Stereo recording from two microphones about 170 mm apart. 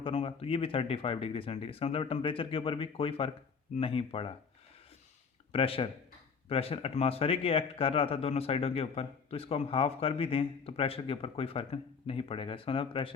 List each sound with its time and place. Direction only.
0.0 s speech: 30° left (ahead or behind)
5.5 s speech: 35° left (ahead or behind)